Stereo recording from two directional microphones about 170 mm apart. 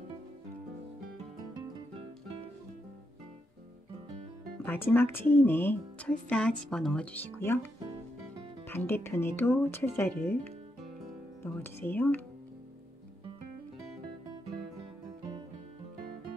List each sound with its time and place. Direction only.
2.0 s music: 35° right (ahead or behind)
4.6 s speech: 10° left (ahead or behind)
11.4 s speech: 10° left (ahead or behind)